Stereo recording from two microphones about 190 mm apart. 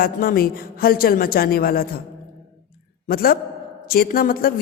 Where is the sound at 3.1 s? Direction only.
50° left (ahead or behind).